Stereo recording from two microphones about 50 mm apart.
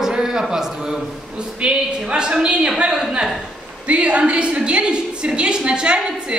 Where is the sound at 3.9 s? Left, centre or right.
Right.